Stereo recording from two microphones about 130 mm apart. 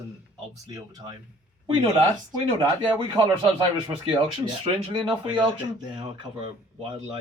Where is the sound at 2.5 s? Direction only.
40° right (ahead or behind).